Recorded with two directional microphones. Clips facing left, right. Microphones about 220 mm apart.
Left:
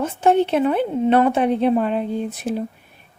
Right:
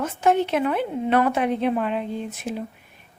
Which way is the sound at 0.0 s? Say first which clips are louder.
Left 4 dB; 30° left (ahead or behind).